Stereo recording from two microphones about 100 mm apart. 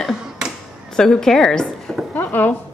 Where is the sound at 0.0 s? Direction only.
5° right (ahead or behind).